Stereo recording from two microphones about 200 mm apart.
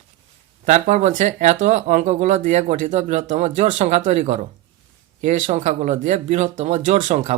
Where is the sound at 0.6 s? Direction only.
35° right (ahead or behind).